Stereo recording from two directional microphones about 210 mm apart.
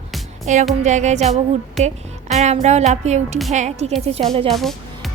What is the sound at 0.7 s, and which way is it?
Music, 35° right (ahead or behind).